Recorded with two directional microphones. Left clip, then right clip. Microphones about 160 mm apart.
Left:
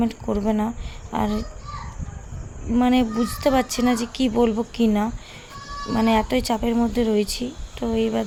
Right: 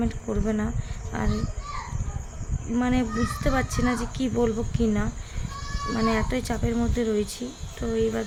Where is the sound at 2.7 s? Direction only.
30° left (ahead or behind).